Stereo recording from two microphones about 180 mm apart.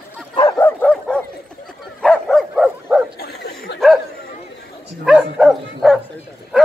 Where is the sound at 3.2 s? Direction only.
60° left (ahead or behind).